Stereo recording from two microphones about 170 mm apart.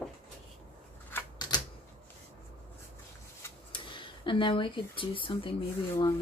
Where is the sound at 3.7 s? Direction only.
30° left (ahead or behind).